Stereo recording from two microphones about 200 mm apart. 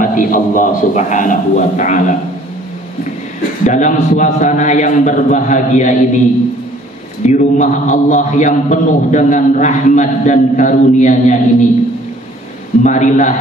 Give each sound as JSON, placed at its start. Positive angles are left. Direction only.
{"t": 0.0, "sound": "a man's voice", "side_deg": 45}
{"t": 3.6, "sound": "a man's voice", "side_deg": 40}
{"t": 7.2, "sound": "a man's voice", "side_deg": 40}
{"t": 12.8, "sound": "a man's voice", "side_deg": 35}